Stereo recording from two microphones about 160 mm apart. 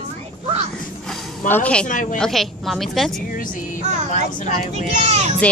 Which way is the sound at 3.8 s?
45° right (ahead or behind).